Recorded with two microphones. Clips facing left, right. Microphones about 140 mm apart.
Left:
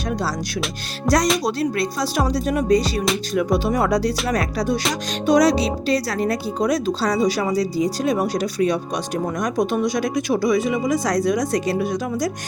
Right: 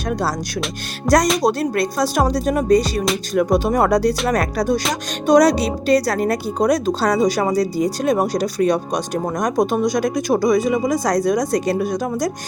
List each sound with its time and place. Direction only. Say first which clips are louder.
0.1 s speech: right 3 dB; 50° right (ahead or behind)
1.1 s music: right 3 dB; centre (ahead or behind)
1.4 s speech: right 3 dB; 45° right (ahead or behind)